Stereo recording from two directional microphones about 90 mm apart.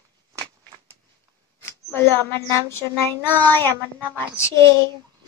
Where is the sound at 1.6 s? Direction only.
25° left (ahead or behind).